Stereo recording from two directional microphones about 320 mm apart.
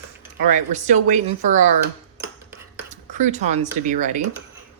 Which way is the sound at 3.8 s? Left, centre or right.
Right.